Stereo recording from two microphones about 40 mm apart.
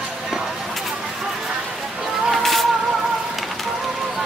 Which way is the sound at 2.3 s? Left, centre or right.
Centre.